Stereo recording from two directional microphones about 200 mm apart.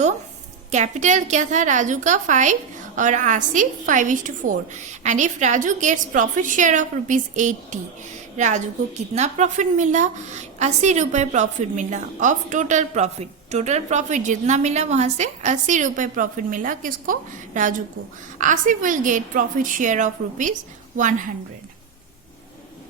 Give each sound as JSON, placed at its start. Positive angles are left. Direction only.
{"t": 0.7, "sound": "a woman's voice", "side_deg": -35}